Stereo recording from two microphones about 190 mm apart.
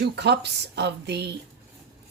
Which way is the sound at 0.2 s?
60° right (ahead or behind).